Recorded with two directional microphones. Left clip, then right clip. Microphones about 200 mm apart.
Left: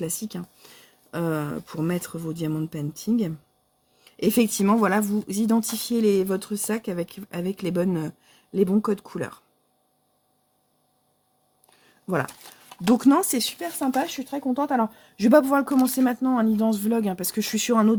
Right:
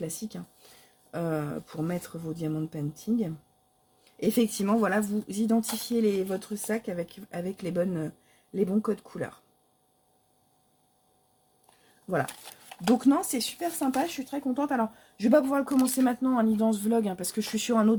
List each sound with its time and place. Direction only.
0.0 s speech: 50° left (ahead or behind)
12.9 s speech: 55° left (ahead or behind); by 17.9 s 35° left (ahead or behind)